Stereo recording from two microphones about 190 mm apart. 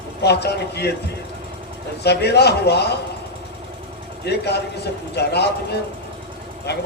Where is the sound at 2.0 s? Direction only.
60° left (ahead or behind).